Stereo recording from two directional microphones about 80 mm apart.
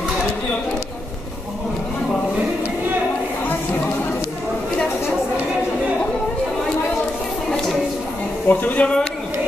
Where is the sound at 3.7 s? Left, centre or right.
Left.